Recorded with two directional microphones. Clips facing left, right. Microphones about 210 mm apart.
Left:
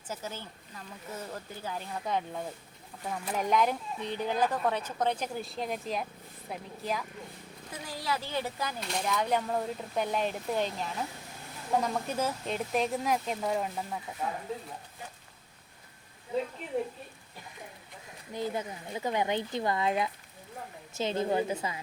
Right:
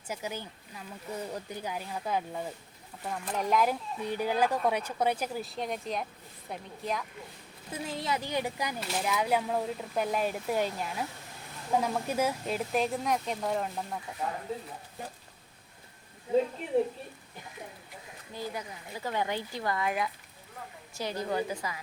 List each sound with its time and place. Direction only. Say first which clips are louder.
0.1 s speech: right 2 dB; 15° right (ahead or behind)
7.9 s speech: right 1 dB; 20° right (ahead or behind)
8.8 s speech: even; 5° right (ahead or behind)
18.3 s speech: left 4 dB; 20° left (ahead or behind)